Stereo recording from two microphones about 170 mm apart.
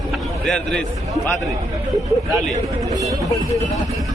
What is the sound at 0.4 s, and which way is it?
Speech, centre (ahead or behind).